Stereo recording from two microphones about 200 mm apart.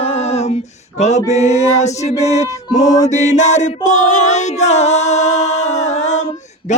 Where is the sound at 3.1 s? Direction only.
35° left (ahead or behind).